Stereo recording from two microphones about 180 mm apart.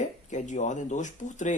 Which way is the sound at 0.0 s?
40° left (ahead or behind).